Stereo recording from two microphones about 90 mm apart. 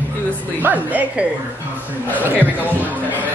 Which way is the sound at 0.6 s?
20° right (ahead or behind).